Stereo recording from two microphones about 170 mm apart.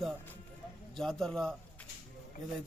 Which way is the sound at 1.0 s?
Centre (ahead or behind).